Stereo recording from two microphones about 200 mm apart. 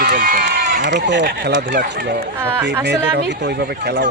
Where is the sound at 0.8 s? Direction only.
60° right (ahead or behind).